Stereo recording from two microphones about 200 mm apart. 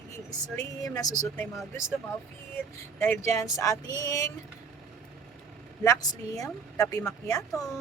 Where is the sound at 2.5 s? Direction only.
10° left (ahead or behind).